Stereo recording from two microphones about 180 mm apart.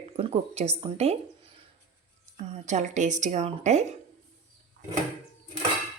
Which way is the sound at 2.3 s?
40° right (ahead or behind).